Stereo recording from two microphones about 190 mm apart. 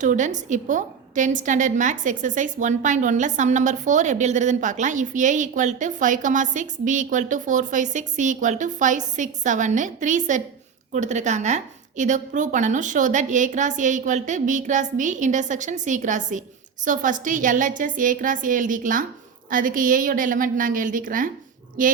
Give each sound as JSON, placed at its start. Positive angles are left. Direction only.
{"t": 0.0, "sound": "a woman's voice", "side_deg": -40}